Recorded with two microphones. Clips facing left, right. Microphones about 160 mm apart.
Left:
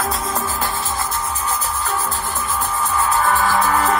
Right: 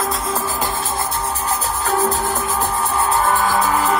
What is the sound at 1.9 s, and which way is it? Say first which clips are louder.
Music: right 5 dB; 40° right (ahead or behind).